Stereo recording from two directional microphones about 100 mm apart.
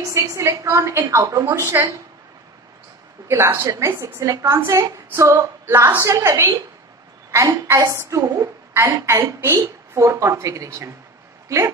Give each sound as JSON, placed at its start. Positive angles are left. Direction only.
{"t": 0.1, "sound": "a woman's voice", "side_deg": -30}
{"t": 3.3, "sound": "a woman's voice", "side_deg": -25}